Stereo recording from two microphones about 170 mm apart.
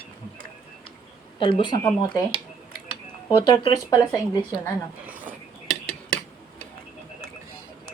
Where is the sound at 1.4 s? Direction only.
30° left (ahead or behind).